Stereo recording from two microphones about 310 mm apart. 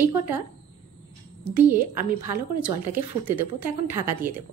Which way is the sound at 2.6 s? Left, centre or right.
Centre.